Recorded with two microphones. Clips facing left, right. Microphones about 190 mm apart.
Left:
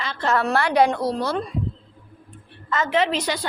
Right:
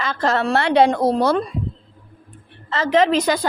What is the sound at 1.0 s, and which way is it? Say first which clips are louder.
Speech: right 7 dB; 60° right (ahead or behind).